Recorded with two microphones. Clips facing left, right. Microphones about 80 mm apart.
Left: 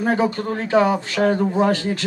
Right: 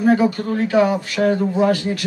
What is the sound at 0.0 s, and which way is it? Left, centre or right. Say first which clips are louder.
Speech: right 4 dB; left.